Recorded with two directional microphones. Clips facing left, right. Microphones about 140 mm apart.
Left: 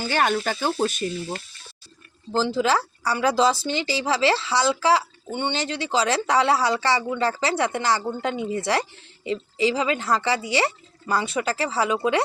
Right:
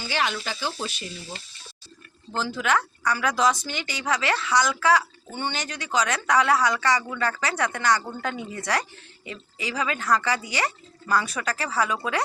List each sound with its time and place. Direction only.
0.0 s speech: 50° left (ahead or behind)
2.3 s speech: 30° left (ahead or behind)